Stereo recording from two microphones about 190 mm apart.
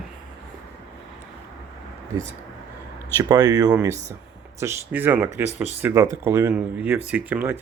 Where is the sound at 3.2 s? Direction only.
20° right (ahead or behind).